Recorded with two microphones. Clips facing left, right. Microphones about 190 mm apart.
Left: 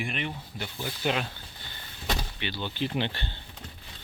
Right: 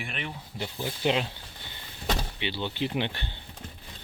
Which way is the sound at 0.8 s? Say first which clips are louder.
Right 2 dB; 25° right (ahead or behind).